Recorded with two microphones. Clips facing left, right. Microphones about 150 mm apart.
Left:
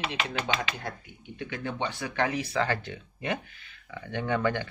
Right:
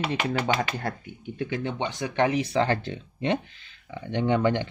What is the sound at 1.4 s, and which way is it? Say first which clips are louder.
Speech: right 4 dB; 25° right (ahead or behind).